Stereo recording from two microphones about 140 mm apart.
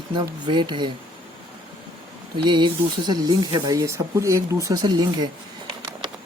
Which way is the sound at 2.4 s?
35° right (ahead or behind).